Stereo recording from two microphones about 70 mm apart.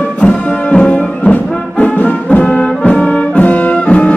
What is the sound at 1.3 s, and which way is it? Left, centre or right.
Brass instrument, left.